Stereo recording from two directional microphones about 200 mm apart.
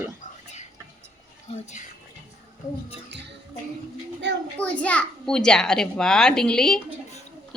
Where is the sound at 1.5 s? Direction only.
35° left (ahead or behind).